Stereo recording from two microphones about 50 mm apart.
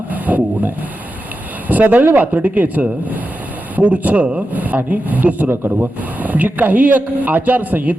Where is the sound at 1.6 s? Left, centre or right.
Right.